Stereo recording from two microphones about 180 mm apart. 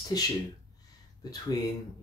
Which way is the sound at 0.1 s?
20° left (ahead or behind).